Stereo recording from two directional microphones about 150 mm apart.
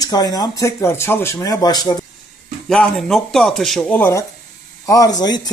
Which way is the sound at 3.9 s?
15° left (ahead or behind).